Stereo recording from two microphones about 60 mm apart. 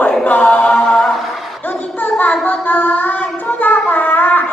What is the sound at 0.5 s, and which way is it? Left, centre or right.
A capella, left.